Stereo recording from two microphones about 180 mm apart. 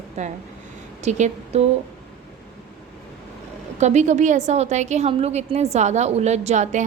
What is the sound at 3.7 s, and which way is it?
A woman's voice, 40° right (ahead or behind).